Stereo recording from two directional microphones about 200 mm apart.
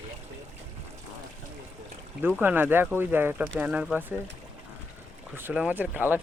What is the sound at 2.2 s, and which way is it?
Speech, 10° right (ahead or behind).